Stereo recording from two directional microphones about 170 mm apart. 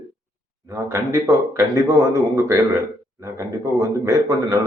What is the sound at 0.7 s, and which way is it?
A man's voice, 15° right (ahead or behind).